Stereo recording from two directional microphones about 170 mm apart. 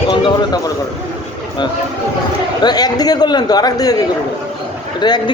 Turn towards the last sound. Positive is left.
turn(degrees=25)  # may be behind; listen again after turning